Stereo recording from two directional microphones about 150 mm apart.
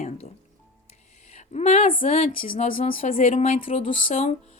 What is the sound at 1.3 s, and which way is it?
Speech, 50° left (ahead or behind).